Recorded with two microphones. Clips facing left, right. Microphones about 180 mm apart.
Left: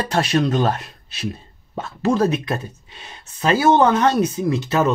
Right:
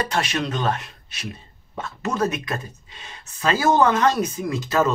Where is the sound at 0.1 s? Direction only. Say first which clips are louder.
Left 6 dB; 35° left (ahead or behind).